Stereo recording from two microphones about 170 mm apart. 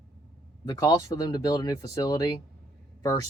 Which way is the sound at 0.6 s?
25° left (ahead or behind).